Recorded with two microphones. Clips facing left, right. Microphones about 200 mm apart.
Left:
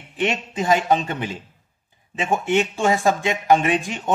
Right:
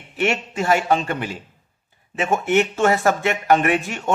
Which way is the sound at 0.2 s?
15° left (ahead or behind).